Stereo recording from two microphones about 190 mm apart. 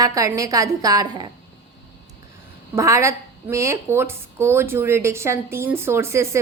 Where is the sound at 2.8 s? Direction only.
15° right (ahead or behind).